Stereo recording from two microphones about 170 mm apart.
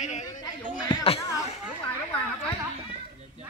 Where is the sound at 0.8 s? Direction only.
30° left (ahead or behind).